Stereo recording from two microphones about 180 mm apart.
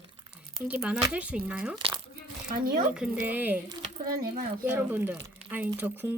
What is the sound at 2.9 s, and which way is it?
Speech, 5° right (ahead or behind).